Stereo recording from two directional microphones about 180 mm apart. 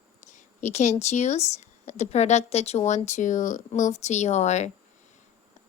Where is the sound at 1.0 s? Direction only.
40° left (ahead or behind).